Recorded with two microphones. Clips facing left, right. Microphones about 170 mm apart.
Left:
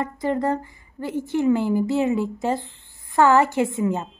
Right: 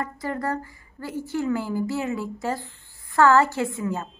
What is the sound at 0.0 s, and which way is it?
A woman's voice, 20° left (ahead or behind).